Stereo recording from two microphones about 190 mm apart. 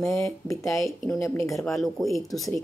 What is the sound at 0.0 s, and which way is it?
Speech, 15° left (ahead or behind).